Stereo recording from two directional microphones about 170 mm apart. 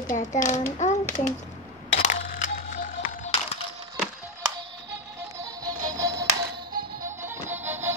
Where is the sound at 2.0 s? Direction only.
50° left (ahead or behind).